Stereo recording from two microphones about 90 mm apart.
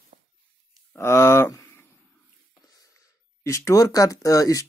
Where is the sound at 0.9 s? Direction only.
30° left (ahead or behind).